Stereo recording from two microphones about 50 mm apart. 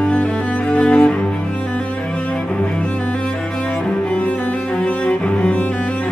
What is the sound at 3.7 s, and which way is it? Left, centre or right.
Cello, centre.